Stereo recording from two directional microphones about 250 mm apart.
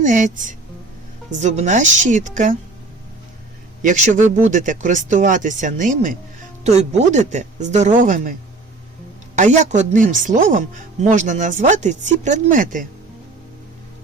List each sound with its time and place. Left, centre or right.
0.0 s speech: right
3.8 s speech: right